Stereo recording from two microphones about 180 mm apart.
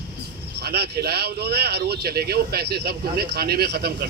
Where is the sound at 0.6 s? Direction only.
65° right (ahead or behind).